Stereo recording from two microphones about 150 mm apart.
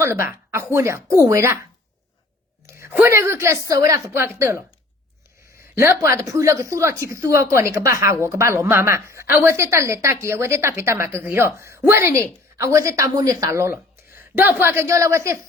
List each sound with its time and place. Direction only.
0.0 s a woman's voice: 15° right (ahead or behind)
2.6 s a woman's voice: 15° right (ahead or behind)
5.7 s a woman's voice: 15° right (ahead or behind)